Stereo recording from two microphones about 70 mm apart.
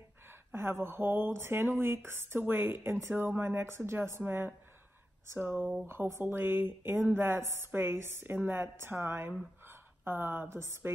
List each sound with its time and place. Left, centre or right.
0.5 s speech: right
5.9 s a woman's voice: right